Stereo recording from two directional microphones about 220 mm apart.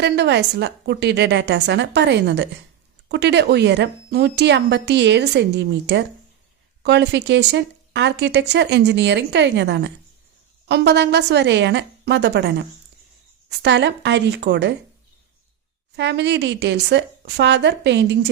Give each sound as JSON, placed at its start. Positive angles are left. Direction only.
{"t": 0.0, "sound": "speech", "side_deg": -50}
{"t": 13.6, "sound": "speech", "side_deg": -50}
{"t": 16.0, "sound": "speech", "side_deg": -50}